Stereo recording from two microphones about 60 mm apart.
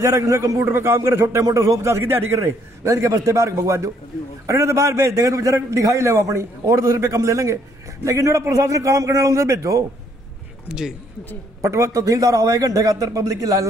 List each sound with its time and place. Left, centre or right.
0.0 s a man's voice: right
10.7 s speech: centre
11.6 s a man's voice: right